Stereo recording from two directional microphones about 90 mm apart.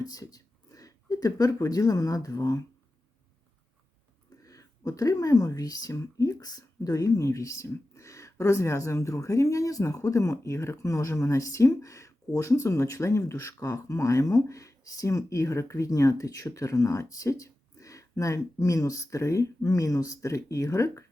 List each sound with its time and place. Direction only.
0.0 s speech: 45° left (ahead or behind)
4.4 s speech: 40° left (ahead or behind)